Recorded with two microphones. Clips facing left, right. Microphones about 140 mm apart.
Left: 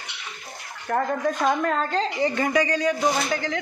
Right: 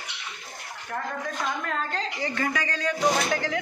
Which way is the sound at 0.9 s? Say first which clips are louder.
Left 9 dB; 50° left (ahead or behind).